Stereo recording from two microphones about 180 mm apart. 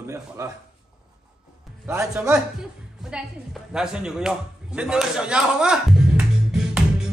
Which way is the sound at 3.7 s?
5° right (ahead or behind).